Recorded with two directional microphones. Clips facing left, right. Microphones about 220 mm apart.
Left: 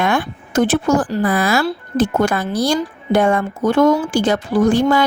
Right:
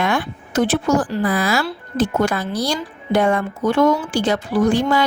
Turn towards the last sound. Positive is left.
turn(degrees=45)  # may be behind; listen again after turning